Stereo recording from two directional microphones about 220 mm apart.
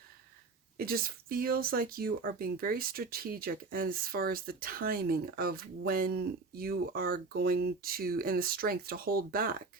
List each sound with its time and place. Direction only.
0.8 s speech: 40° right (ahead or behind)